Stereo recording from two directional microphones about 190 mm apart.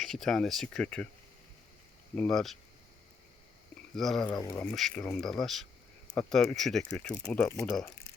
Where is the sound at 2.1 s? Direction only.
5° left (ahead or behind).